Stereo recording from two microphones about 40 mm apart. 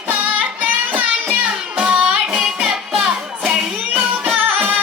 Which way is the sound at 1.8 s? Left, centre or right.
Right.